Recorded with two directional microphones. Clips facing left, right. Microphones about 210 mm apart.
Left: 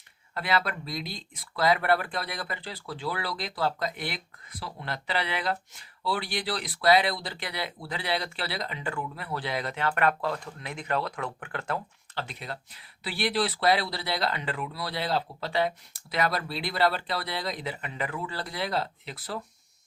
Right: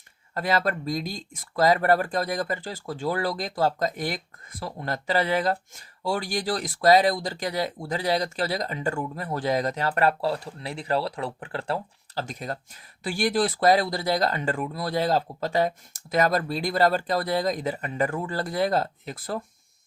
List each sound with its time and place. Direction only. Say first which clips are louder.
0.3 s speech: right 4 dB; 45° right (ahead or behind)
12.2 s speech: right 6 dB; 45° right (ahead or behind)